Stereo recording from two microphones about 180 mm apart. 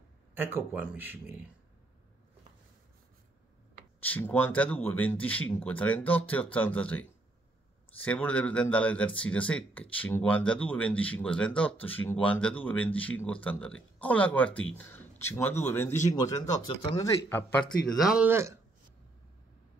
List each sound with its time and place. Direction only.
0.3 s speech: 10° right (ahead or behind)
4.0 s speech: 10° left (ahead or behind)
17.9 s speech: 5° right (ahead or behind)